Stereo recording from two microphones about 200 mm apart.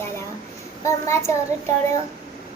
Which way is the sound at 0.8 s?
15° left (ahead or behind).